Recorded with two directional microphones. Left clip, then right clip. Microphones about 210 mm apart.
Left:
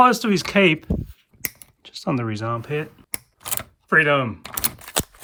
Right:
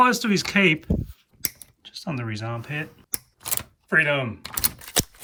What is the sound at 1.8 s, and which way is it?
Speech, 25° left (ahead or behind).